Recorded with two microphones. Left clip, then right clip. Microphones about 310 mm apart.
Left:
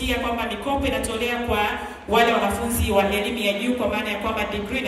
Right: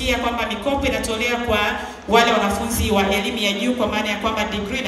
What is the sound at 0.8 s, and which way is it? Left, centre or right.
Speech, right.